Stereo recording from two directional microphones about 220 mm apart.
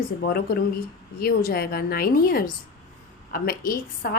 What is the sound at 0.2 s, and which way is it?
A woman's voice, 45° left (ahead or behind).